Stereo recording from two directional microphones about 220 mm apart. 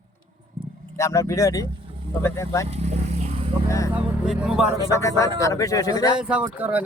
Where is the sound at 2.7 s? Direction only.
30° right (ahead or behind).